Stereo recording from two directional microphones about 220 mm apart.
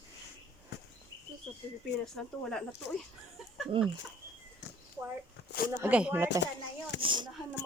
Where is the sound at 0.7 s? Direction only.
50° left (ahead or behind).